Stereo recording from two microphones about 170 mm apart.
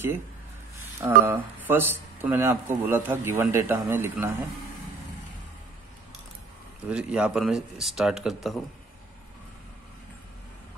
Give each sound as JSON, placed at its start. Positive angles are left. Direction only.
{"t": 1.0, "sound": "speech", "side_deg": -10}
{"t": 6.9, "sound": "speech", "side_deg": -5}